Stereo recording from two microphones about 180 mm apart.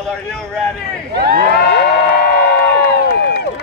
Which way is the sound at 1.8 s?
65° left (ahead or behind).